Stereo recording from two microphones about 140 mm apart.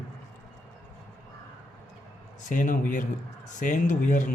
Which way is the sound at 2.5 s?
65° left (ahead or behind).